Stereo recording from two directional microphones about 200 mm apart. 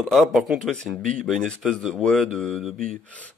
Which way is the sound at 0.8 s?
40° right (ahead or behind).